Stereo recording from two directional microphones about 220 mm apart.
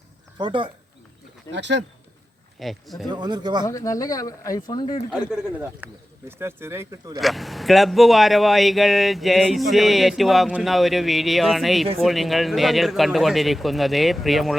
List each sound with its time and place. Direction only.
0.3 s speech: 20° right (ahead or behind)
1.5 s speech: 55° right (ahead or behind)
2.6 s speech: centre (ahead or behind)
3.1 s speech: 20° right (ahead or behind)
3.7 s speech: 15° left (ahead or behind)
5.8 s speech: 10° right (ahead or behind)
7.2 s speech: centre (ahead or behind)